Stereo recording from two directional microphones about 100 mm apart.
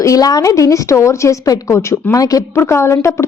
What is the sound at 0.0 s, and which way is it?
A woman's voice, 35° left (ahead or behind).